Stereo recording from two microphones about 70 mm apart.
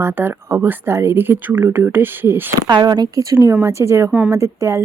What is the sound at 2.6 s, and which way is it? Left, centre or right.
Speech, right.